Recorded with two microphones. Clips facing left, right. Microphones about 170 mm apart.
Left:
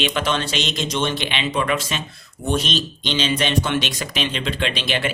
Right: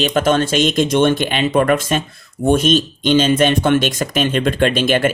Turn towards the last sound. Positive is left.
turn(degrees=-45)  # may be behind; listen again after turning